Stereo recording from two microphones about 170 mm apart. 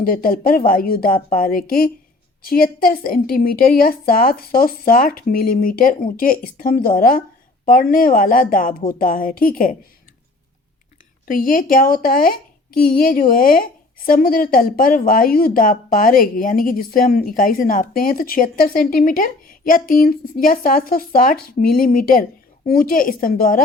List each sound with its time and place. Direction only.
0.0 s a woman's voice: 60° left (ahead or behind)
11.3 s a woman's voice: 55° left (ahead or behind)